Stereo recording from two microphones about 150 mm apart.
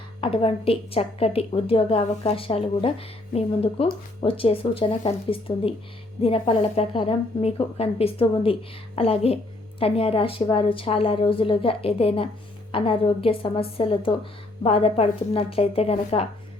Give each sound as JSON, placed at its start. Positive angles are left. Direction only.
{"t": 0.2, "sound": "a woman's voice", "side_deg": 40}